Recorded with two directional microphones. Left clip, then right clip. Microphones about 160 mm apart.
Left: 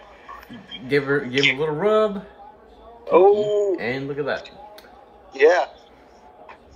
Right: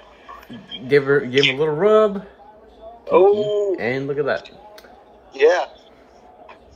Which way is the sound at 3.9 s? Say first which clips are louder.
Right 5 dB; 40° right (ahead or behind).